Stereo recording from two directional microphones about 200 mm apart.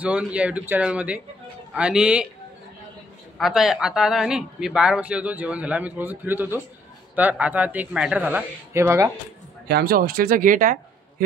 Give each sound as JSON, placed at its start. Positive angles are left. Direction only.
{"t": 0.0, "sound": "speech", "side_deg": -5}
{"t": 3.3, "sound": "speech", "side_deg": 0}
{"t": 9.7, "sound": "speech", "side_deg": -50}